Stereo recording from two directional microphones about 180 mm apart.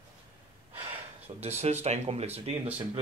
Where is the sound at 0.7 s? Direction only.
35° right (ahead or behind).